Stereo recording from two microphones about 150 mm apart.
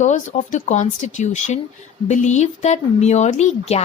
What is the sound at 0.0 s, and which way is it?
A woman's voice, 55° left (ahead or behind).